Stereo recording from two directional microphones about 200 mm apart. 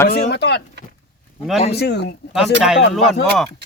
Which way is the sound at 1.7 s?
55° left (ahead or behind).